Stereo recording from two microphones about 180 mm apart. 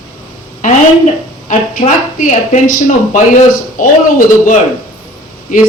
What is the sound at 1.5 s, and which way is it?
Speech, 45° left (ahead or behind).